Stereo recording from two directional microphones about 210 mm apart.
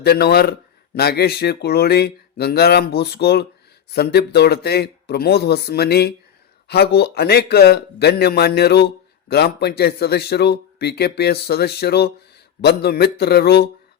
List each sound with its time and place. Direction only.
0.0 s speech: 50° left (ahead or behind)